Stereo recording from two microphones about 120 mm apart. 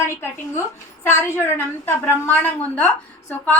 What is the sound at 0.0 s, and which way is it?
A woman's voice, 20° left (ahead or behind).